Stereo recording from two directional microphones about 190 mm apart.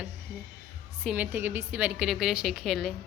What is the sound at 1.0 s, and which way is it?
A woman's voice, 10° right (ahead or behind).